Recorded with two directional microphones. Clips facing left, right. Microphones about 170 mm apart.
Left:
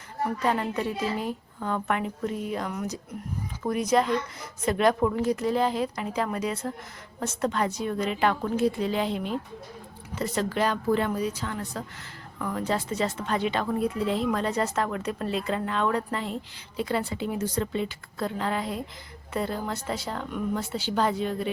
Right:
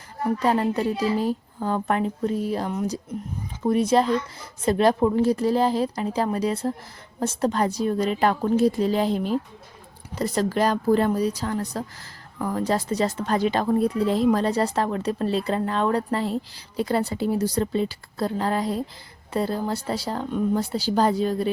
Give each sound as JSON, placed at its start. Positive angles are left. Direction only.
{"t": 0.4, "sound": "a woman's voice", "side_deg": -35}